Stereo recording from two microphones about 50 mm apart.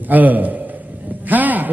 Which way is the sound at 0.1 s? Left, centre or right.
Right.